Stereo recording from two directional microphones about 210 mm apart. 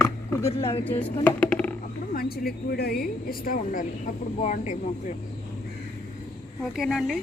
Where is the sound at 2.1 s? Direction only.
45° left (ahead or behind).